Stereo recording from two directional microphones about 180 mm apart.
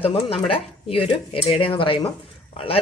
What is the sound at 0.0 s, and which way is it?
A woman's voice, 30° left (ahead or behind).